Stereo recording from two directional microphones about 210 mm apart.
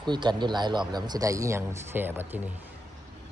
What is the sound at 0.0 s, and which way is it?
Speech, 20° right (ahead or behind).